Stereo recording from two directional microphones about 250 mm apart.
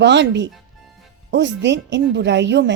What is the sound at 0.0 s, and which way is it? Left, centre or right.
A woman's voice, right.